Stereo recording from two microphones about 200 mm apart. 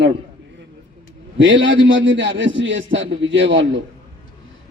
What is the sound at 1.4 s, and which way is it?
A man's voice, 65° right (ahead or behind).